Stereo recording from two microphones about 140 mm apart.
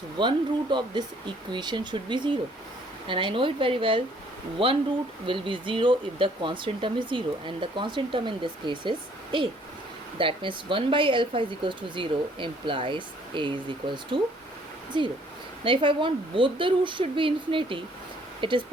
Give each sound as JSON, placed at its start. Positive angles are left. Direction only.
{"t": 0.2, "sound": "speech", "side_deg": -35}